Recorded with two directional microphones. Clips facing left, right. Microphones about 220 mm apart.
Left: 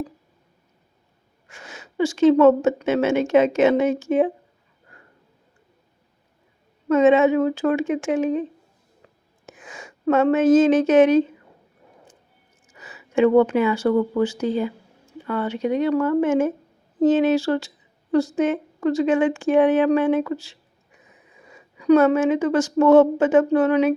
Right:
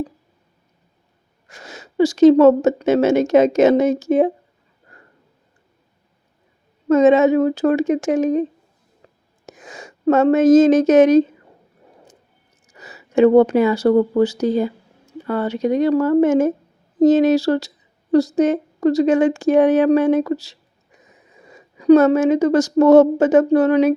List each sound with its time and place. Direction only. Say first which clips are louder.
1.5 s speech: right 3 dB; 40° right (ahead or behind)
6.8 s speech: right 3 dB; 40° right (ahead or behind)
9.0 s a sound: right 3 dB; 35° right (ahead or behind)
9.5 s speech: right 3 dB; 40° right (ahead or behind)
12.6 s speech: right 3 dB; 40° right (ahead or behind)